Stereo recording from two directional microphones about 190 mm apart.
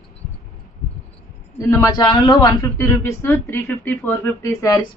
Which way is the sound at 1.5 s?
15° left (ahead or behind).